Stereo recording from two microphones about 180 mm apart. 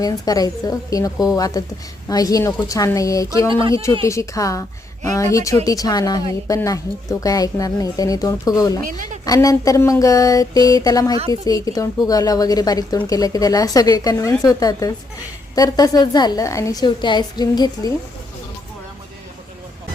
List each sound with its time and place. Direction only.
0.0 s speech: 20° left (ahead or behind)
3.5 s speech: 30° right (ahead or behind)
4.0 s a woman's voice: 15° left (ahead or behind)
8.8 s a woman's voice: 50° right (ahead or behind)
9.2 s speech: 20° left (ahead or behind)